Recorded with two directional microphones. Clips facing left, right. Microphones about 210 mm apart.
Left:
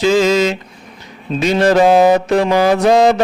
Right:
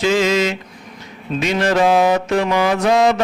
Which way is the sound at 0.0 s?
35° left (ahead or behind).